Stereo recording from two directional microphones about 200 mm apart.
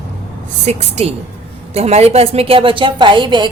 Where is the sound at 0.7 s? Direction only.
35° right (ahead or behind).